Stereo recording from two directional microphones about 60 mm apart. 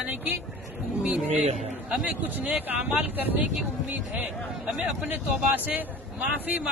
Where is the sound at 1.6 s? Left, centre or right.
Centre.